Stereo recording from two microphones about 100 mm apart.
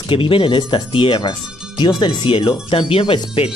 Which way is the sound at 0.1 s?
60° left (ahead or behind).